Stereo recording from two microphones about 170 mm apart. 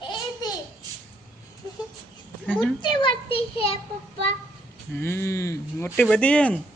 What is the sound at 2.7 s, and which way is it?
Speech, 25° left (ahead or behind).